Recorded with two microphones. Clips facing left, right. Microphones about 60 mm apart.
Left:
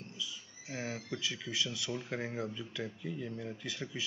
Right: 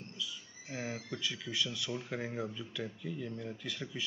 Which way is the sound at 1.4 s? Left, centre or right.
Centre.